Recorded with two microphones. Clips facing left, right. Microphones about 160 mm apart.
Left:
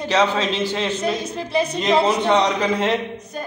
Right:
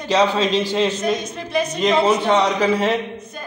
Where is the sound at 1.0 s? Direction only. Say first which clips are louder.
Right 1 dB; 30° left (ahead or behind).